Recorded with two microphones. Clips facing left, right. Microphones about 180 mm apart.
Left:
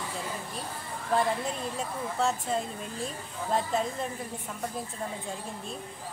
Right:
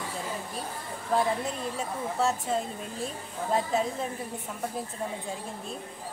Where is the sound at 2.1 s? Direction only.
5° right (ahead or behind).